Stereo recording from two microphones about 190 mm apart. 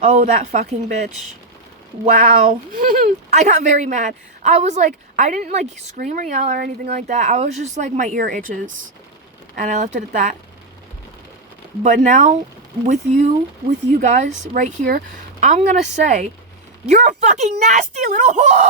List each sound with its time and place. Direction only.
0.2 s speech: 40° right (ahead or behind)
2.4 s speech: 35° right (ahead or behind)
2.8 s speech: 45° right (ahead or behind)
9.6 s speech: 40° right (ahead or behind)
11.8 s speech: 40° right (ahead or behind)